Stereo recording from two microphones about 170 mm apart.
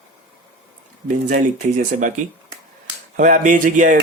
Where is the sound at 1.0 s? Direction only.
50° right (ahead or behind).